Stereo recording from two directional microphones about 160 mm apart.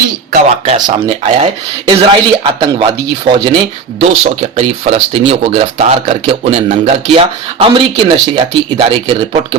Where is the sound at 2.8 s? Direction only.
30° right (ahead or behind).